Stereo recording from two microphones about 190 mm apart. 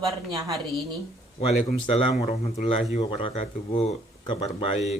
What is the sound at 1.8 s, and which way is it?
Speech, 30° left (ahead or behind).